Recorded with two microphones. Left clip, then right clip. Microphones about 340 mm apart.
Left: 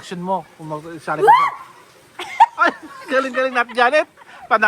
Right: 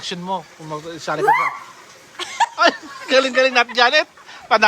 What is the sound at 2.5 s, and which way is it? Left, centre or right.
Speech, centre.